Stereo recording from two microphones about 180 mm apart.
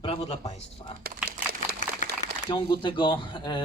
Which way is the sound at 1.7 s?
60° right (ahead or behind).